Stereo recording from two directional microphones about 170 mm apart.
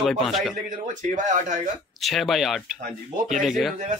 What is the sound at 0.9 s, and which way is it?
Speech, 45° right (ahead or behind).